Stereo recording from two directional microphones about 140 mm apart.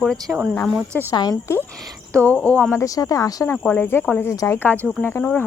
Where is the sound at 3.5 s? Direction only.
10° left (ahead or behind).